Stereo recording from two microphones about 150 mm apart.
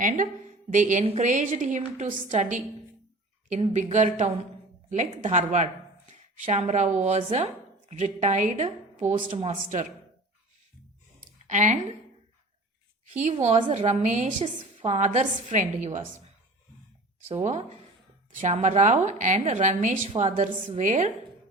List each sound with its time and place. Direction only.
0.0 s a woman's voice: 55° right (ahead or behind)
3.7 s a woman's voice: 50° right (ahead or behind)
11.4 s speech: 55° right (ahead or behind)
13.1 s a woman's voice: 50° right (ahead or behind)
17.4 s a woman's voice: 50° right (ahead or behind)